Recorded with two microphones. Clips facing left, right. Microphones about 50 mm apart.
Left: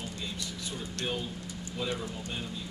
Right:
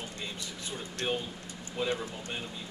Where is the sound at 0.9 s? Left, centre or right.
Centre.